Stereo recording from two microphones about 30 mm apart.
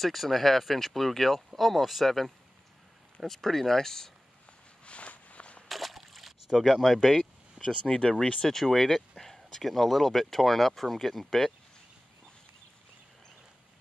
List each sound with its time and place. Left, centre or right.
0.0 s speech: centre
4.8 s walk: left
5.7 s a sound: centre
6.5 s speech: centre
7.8 s speech: left
8.2 s speech: left
8.5 s speech: centre